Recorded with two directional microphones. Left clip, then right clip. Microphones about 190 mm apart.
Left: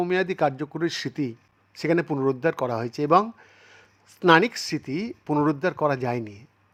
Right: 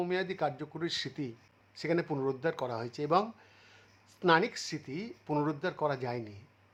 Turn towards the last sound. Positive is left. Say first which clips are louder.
# left 9 dB
turn(degrees=35)  # may be behind; listen again after turning